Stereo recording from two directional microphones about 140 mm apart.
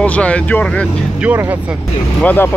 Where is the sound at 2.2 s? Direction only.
15° left (ahead or behind).